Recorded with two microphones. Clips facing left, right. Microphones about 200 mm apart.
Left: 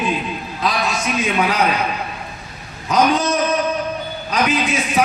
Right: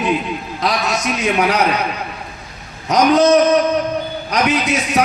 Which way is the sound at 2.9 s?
70° right (ahead or behind).